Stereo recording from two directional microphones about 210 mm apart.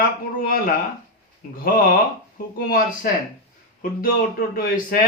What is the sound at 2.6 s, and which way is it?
Speech, 45° left (ahead or behind).